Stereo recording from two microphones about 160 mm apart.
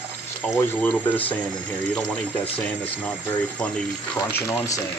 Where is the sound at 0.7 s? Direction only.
10° left (ahead or behind).